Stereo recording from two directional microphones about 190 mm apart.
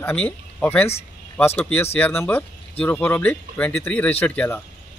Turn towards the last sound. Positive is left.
turn(degrees=10)  # may be behind; listen again after turning